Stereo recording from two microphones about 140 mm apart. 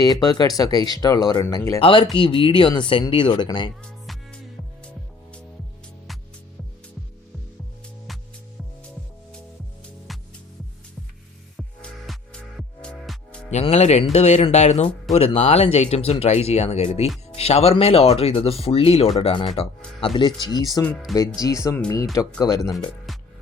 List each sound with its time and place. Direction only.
0.0 s speech: 30° left (ahead or behind)
1.8 s speech: 35° left (ahead or behind)
4.0 s music: centre (ahead or behind)
10.1 s music: centre (ahead or behind)
11.5 s music: centre (ahead or behind)
13.5 s speech: 50° left (ahead or behind); by 22.7 s 25° left (ahead or behind)
22.7 s speech: centre (ahead or behind)